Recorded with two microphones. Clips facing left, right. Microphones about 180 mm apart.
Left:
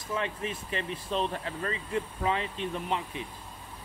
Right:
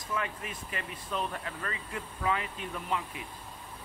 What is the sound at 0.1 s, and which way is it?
Speech, 25° left (ahead or behind).